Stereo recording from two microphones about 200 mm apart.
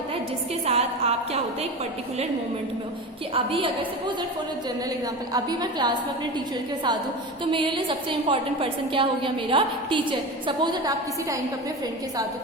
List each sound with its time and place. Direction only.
0.6 s music: 30° right (ahead or behind)
3.3 s a woman's voice: 25° right (ahead or behind)
5.3 s a woman's voice: 20° right (ahead or behind)
7.5 s a woman's voice: 25° right (ahead or behind)